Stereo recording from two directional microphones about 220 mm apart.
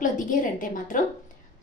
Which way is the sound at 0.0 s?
35° left (ahead or behind).